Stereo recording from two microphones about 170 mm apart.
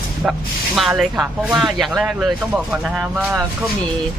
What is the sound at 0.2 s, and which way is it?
Speech, 5° right (ahead or behind).